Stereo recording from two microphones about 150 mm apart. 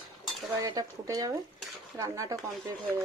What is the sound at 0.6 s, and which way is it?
Speech, 25° right (ahead or behind).